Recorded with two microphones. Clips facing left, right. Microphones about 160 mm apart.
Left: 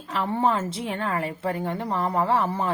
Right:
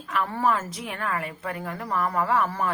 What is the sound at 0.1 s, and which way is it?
A woman's voice, 25° left (ahead or behind).